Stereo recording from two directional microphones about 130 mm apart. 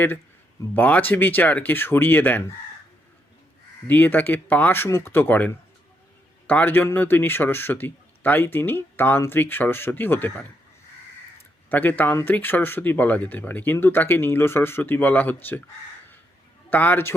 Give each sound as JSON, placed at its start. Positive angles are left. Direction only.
{"t": 0.7, "sound": "a man's voice", "side_deg": 10}
{"t": 3.8, "sound": "a man's voice", "side_deg": 15}
{"t": 11.7, "sound": "a man's voice", "side_deg": 15}
{"t": 16.6, "sound": "a man's voice", "side_deg": 15}